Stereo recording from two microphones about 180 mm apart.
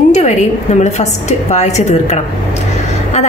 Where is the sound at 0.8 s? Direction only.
40° left (ahead or behind).